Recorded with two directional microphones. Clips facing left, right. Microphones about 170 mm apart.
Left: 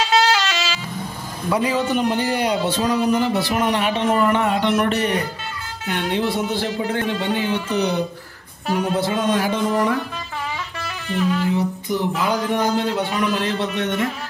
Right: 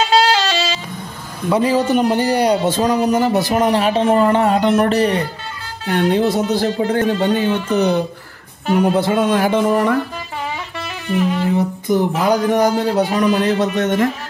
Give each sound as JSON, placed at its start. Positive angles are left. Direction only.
{"t": 0.1, "sound": "music", "side_deg": -30}
{"t": 1.5, "sound": "a man's voice", "side_deg": -35}
{"t": 9.0, "sound": "music", "side_deg": -55}
{"t": 11.5, "sound": "a man's voice", "side_deg": -45}
{"t": 13.1, "sound": "music", "side_deg": -40}